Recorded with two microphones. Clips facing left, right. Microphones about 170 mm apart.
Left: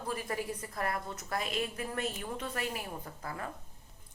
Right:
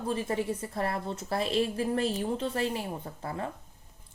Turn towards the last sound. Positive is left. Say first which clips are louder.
# right 5 dB
turn(degrees=-25)  # may be behind; listen again after turning